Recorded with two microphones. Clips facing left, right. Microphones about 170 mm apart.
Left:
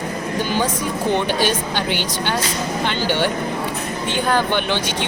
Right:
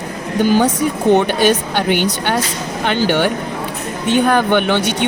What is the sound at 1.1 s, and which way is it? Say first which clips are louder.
Speech: right 6 dB; 55° right (ahead or behind).